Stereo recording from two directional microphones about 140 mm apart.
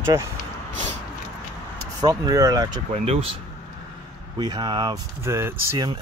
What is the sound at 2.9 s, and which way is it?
Speech, 45° right (ahead or behind).